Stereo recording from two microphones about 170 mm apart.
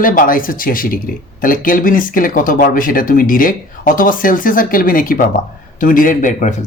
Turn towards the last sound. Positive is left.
turn(degrees=50)  # may be behind; listen again after turning